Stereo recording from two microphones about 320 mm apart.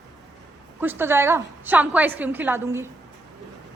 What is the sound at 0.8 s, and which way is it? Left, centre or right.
A woman's voice, centre.